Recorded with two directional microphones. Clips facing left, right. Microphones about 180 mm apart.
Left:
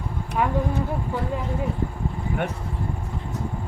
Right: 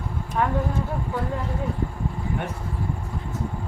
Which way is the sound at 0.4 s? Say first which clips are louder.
Even; 10° left (ahead or behind).